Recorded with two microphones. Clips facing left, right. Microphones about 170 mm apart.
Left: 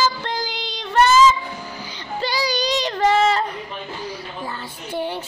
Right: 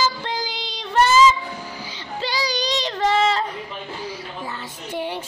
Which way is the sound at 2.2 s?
50° left (ahead or behind).